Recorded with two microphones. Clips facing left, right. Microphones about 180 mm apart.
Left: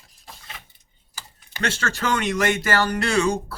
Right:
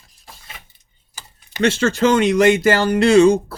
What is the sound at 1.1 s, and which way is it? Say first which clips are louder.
Speech: right 2 dB; 20° right (ahead or behind).